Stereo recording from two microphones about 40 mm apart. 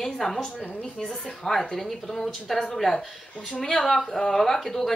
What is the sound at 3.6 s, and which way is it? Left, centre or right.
Speech, centre.